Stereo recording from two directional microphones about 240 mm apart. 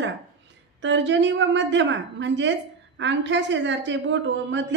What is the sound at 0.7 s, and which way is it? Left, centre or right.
A woman's voice, right.